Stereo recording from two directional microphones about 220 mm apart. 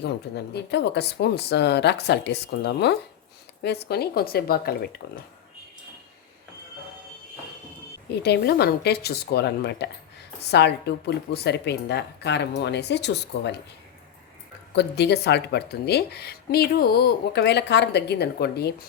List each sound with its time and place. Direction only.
0.0 s speech: 50° left (ahead or behind)
8.2 s speech: 45° left (ahead or behind)
14.8 s speech: 50° left (ahead or behind)